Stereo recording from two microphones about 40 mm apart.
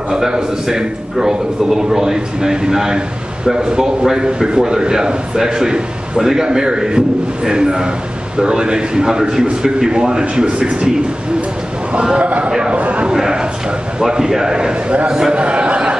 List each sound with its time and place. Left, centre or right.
0.1 s a man's voice: centre
11.9 s a man's voice: right
12.7 s a man's voice: right
13.0 s a sound: centre
13.9 s a man's voice: centre
15.4 s a sound: right